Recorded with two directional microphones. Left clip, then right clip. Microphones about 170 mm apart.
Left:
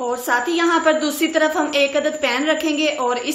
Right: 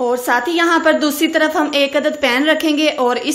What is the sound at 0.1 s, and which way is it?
A woman's voice, 40° right (ahead or behind).